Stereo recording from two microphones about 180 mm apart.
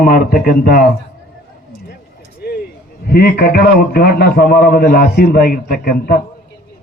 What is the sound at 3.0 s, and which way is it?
A man's voice, 60° left (ahead or behind).